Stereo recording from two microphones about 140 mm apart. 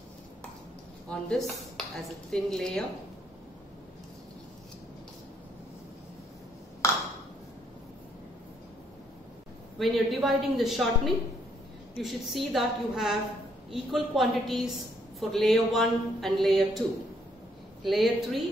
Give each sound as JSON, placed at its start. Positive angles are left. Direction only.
{"t": 1.0, "sound": "speech", "side_deg": 5}
{"t": 6.8, "sound": "ping", "side_deg": 20}
{"t": 9.8, "sound": "speech", "side_deg": 0}
{"t": 17.8, "sound": "speech", "side_deg": 0}